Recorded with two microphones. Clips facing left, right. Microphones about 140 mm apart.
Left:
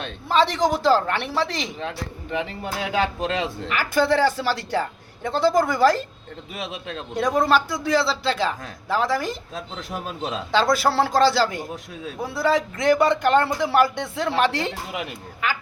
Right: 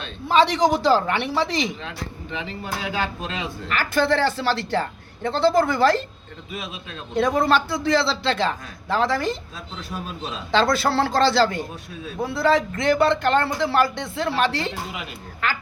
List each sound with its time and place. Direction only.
0.3 s a woman's voice: centre (ahead or behind)
2.3 s speech: 55° left (ahead or behind)
3.7 s speech: 10° left (ahead or behind)
6.6 s a man's voice: 70° left (ahead or behind)
7.3 s speech: centre (ahead or behind)
10.5 s speech: 10° left (ahead or behind)
14.2 s speech: 15° left (ahead or behind)